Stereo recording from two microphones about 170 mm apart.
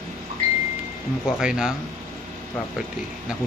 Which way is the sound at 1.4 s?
5° right (ahead or behind).